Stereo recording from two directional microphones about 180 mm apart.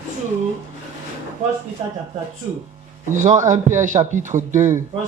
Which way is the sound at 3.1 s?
45° right (ahead or behind).